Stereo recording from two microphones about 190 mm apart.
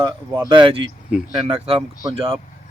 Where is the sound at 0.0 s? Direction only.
20° right (ahead or behind).